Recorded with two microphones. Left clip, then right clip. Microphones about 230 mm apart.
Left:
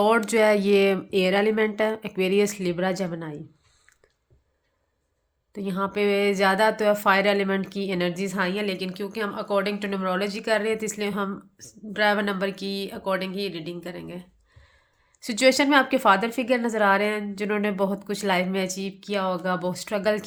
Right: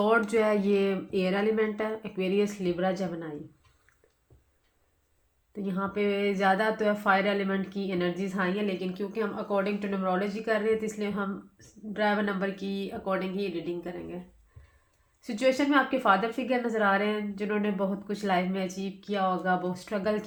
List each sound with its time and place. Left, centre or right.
0.0 s speech: left
5.5 s speech: left
15.2 s speech: left